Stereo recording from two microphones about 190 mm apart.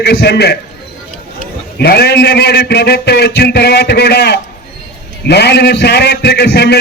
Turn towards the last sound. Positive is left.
turn(degrees=60)  # may be behind; listen again after turning